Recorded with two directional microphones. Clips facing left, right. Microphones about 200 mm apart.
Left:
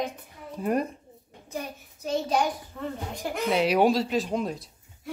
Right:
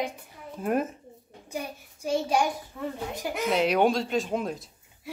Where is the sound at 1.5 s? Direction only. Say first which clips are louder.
Even; 10° right (ahead or behind).